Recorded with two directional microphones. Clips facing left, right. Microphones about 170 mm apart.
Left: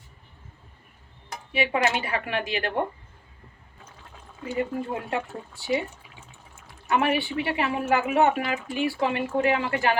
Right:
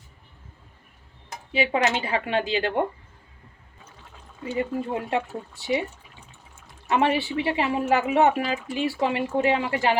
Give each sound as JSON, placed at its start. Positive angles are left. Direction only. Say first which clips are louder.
{"t": 1.5, "sound": "speech", "louder": "right 1 dB", "side_deg": -25}
{"t": 4.5, "sound": "speech", "louder": "right 1 dB", "side_deg": -25}
{"t": 6.8, "sound": "speech", "louder": "right 1 dB", "side_deg": -25}